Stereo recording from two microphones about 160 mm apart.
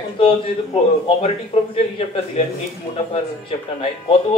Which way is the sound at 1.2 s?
40° left (ahead or behind).